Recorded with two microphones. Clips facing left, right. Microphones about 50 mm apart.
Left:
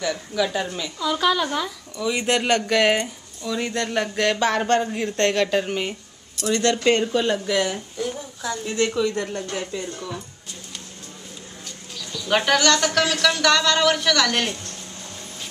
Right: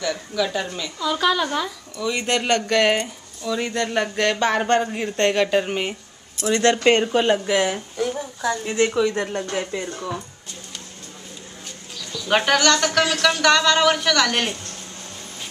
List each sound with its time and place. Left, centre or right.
0.1 s speech: centre
6.3 s speech: right
8.9 s speech: right
12.1 s bird: centre
12.5 s speech: centre